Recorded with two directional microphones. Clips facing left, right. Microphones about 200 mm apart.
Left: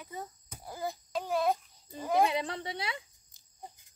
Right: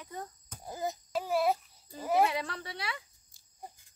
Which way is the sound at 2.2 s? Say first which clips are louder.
Left 2 dB; 25° left (ahead or behind).